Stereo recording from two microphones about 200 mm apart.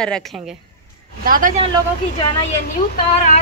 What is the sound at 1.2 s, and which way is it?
Speech, 45° right (ahead or behind).